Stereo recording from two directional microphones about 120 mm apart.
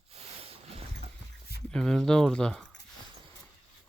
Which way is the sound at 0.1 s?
55° right (ahead or behind).